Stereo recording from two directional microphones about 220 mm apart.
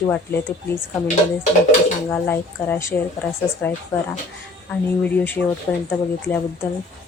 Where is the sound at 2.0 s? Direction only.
10° left (ahead or behind).